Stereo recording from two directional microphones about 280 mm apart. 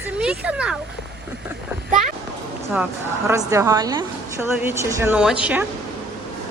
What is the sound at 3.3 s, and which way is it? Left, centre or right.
A woman's voice, centre.